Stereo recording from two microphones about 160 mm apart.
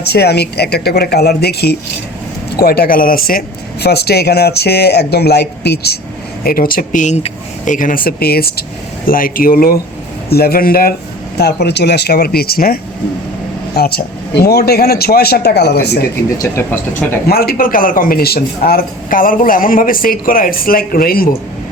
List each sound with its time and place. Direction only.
0.0 s speech: 90° left
2.6 s speech: 70° left (ahead or behind); by 6.0 s 90° left
6.4 s a man's voice: 65° left (ahead or behind)
9.0 s a man's voice: 60° left (ahead or behind)
11.3 s speech: 90° left
16.4 s speech: 15° left (ahead or behind)
17.2 s a man's voice: 70° left (ahead or behind)